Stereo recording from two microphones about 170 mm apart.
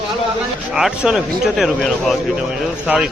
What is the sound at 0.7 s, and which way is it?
Speech, 5° right (ahead or behind).